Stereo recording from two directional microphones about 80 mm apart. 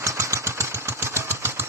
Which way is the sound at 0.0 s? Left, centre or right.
Right.